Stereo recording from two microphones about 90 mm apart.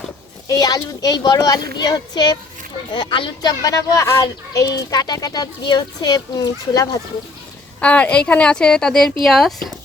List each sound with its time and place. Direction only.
0.4 s speech: 45° left (ahead or behind)
2.9 s a child's voice: 60° left (ahead or behind); by 4.7 s 30° left (ahead or behind)
4.7 s speech: 45° left (ahead or behind)
7.8 s a woman's voice: 15° left (ahead or behind)